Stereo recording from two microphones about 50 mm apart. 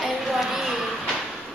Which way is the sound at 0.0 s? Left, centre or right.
Centre.